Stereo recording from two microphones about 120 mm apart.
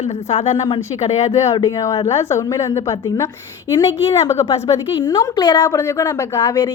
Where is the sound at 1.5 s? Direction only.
25° left (ahead or behind).